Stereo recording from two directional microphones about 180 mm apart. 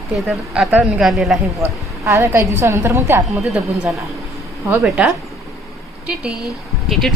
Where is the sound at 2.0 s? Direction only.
15° right (ahead or behind).